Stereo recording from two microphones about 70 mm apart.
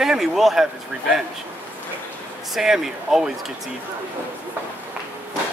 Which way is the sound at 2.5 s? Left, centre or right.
Centre.